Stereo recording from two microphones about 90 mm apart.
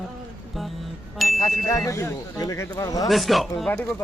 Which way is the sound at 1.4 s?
35° left (ahead or behind).